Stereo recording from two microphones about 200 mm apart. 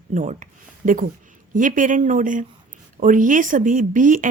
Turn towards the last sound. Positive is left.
turn(degrees=-40)  # may be behind; listen again after turning